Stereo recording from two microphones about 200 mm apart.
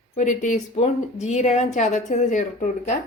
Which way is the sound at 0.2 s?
40° left (ahead or behind).